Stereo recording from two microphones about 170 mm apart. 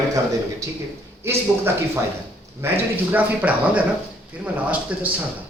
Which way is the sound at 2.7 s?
10° right (ahead or behind).